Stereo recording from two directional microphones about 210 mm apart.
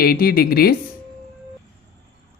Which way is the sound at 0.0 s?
45° left (ahead or behind).